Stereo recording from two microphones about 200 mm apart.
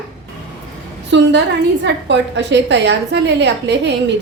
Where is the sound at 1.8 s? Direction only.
60° right (ahead or behind).